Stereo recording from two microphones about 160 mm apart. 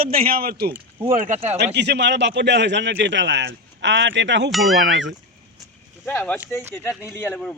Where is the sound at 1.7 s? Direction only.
90° right.